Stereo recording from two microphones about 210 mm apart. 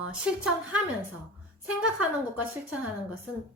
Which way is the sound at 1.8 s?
5° right (ahead or behind).